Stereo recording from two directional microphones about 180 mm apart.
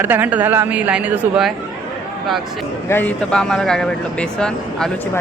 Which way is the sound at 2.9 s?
10° left (ahead or behind).